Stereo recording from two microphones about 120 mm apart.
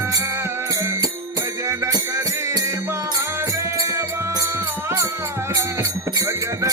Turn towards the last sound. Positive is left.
turn(degrees=-25)  # may be behind; listen again after turning